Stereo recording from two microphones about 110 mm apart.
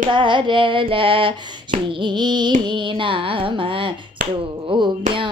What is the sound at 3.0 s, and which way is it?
Speech, 50° right (ahead or behind).